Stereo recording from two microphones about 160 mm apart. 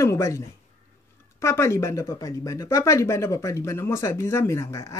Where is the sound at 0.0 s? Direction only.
20° left (ahead or behind).